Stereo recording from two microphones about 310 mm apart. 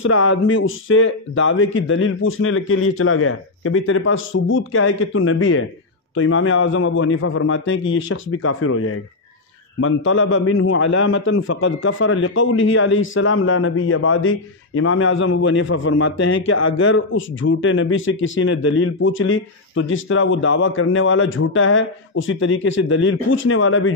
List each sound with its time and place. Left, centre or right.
0.0 s a man's voice: left